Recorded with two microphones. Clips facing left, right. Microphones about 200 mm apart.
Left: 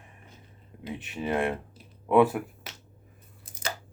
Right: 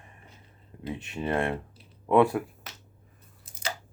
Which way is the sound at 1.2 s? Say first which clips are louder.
Even; 15° left (ahead or behind).